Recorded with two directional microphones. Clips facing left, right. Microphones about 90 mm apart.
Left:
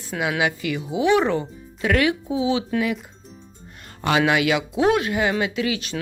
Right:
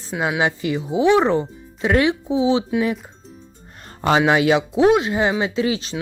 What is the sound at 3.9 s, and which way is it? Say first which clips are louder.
Music: right 3 dB; 35° right (ahead or behind).